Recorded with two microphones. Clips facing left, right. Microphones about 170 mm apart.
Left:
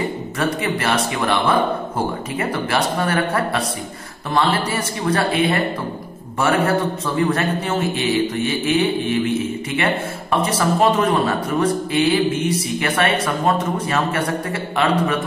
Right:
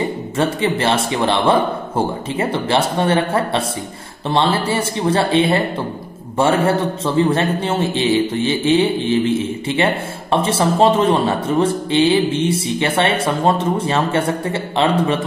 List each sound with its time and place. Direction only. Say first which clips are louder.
0.4 s a man's voice: right 4 dB; 30° right (ahead or behind)